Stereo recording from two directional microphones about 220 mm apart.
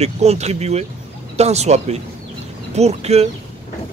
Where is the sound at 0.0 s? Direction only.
30° right (ahead or behind).